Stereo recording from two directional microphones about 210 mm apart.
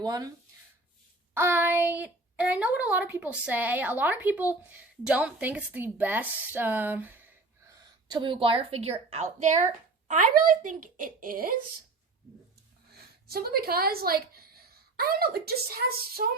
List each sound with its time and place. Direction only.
0.0 s speech: 20° right (ahead or behind)
1.3 s speech: 10° right (ahead or behind)
7.7 s a woman's voice: 20° right (ahead or behind); by 11.5 s 40° right (ahead or behind)
12.9 s a woman's voice: 45° right (ahead or behind)